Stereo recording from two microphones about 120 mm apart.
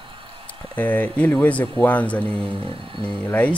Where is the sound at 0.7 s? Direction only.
15° left (ahead or behind).